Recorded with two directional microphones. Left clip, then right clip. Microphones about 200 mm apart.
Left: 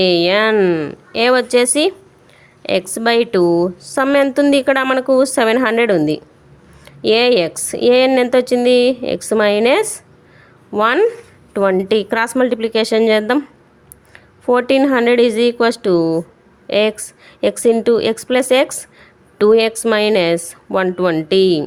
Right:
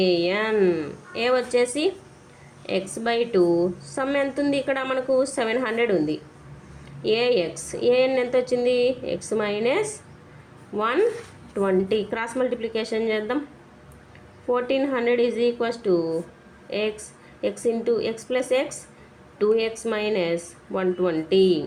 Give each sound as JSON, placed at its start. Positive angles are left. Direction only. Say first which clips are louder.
{"t": 0.0, "sound": "a woman's voice", "louder": "left 9 dB", "side_deg": 55}